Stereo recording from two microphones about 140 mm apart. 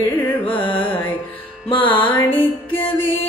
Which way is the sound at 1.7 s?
35° left (ahead or behind).